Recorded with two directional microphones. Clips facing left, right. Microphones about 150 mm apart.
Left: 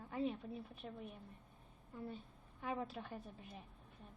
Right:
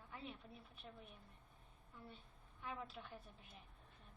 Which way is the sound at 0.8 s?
65° left (ahead or behind).